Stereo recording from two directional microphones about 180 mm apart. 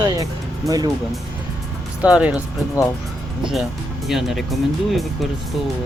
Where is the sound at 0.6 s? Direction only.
20° right (ahead or behind).